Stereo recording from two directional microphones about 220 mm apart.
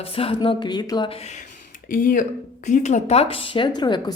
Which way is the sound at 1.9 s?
40° left (ahead or behind).